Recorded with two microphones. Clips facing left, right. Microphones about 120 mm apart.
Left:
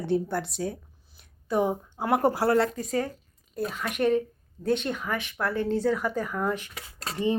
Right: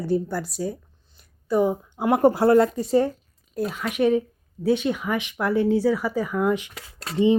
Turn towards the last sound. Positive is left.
turn(degrees=-20)  # may be behind; listen again after turning